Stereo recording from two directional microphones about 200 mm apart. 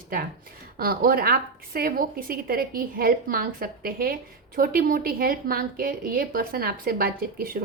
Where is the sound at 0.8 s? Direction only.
45° right (ahead or behind).